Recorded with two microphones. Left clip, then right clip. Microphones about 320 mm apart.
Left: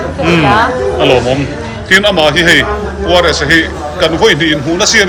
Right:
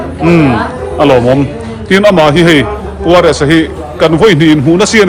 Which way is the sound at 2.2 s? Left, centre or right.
Centre.